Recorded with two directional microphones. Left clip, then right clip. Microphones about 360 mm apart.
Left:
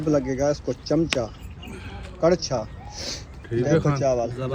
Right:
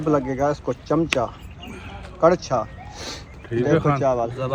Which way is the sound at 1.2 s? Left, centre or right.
Centre.